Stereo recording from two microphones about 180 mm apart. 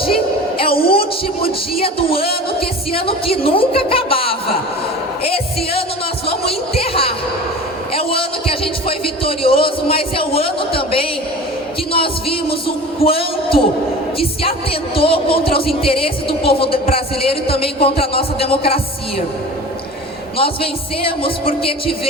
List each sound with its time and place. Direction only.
0.8 s music: 30° left (ahead or behind)
6.2 s a sound: 30° left (ahead or behind)
7.9 s a man's voice: 30° left (ahead or behind)
11.9 s music: 30° left (ahead or behind)
20.4 s music: 30° left (ahead or behind)